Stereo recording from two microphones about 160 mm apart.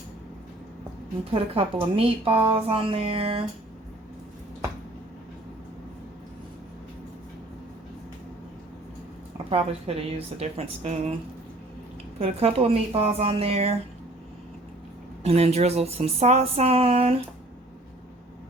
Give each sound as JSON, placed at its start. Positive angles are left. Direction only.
{"t": 1.3, "sound": "a woman's voice", "side_deg": -35}
{"t": 9.5, "sound": "a woman's voice", "side_deg": -40}
{"t": 12.2, "sound": "a woman's voice", "side_deg": -40}
{"t": 15.2, "sound": "a woman's voice", "side_deg": -40}